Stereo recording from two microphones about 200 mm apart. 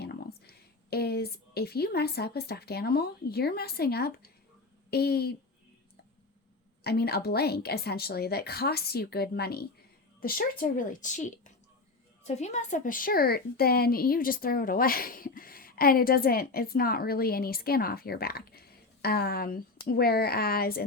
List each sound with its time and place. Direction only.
0.0 s a woman's voice: 55° left (ahead or behind)
6.8 s a woman's voice: 50° left (ahead or behind)